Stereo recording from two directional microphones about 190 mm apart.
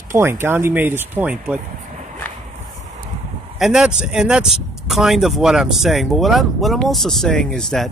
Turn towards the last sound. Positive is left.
turn(degrees=5)  # may be behind; listen again after turning